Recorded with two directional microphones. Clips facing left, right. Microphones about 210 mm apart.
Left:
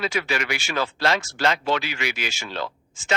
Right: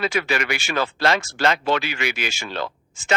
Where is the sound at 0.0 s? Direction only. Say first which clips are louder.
Right 3 dB; 55° right (ahead or behind).